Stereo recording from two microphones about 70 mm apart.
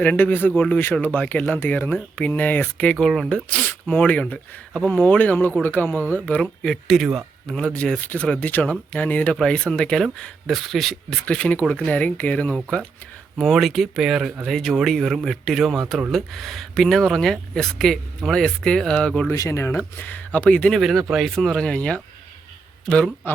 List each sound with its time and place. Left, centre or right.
0.0 s speech: left
6.4 s speech: centre
6.8 s speech: centre
7.4 s speech: centre
11.3 s speech: centre
13.4 s speech: centre
19.3 s speech: left; by 20.7 s centre
20.7 s speech: centre